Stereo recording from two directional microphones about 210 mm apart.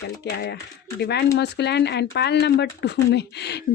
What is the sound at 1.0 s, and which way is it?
Speech, 50° left (ahead or behind).